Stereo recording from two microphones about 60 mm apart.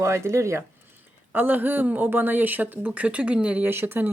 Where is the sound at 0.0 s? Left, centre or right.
Right.